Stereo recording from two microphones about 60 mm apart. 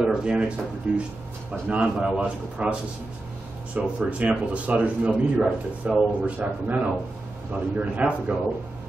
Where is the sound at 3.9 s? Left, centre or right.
Right.